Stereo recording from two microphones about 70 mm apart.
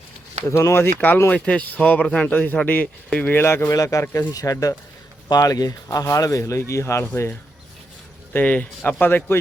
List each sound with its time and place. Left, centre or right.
0.4 s speech: left
0.9 s a man's voice: left
3.3 s speech: left
3.7 s speech: left
6.4 s speech: left
8.3 s speech: left